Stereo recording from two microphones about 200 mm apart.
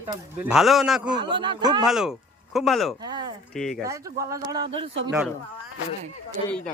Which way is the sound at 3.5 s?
Centre (ahead or behind).